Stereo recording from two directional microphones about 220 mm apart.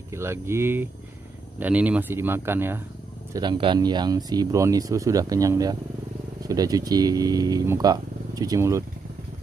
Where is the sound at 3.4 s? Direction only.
20° right (ahead or behind).